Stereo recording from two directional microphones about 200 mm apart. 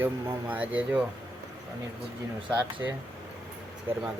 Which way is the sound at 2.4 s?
5° right (ahead or behind).